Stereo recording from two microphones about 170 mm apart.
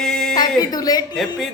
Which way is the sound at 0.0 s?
5° left (ahead or behind).